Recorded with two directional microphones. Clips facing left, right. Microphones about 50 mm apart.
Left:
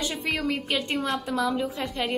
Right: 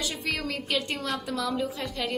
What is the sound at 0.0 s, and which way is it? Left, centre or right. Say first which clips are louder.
A woman's voice: left 3 dB; left.